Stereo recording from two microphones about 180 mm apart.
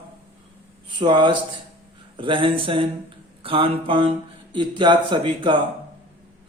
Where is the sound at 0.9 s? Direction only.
25° right (ahead or behind).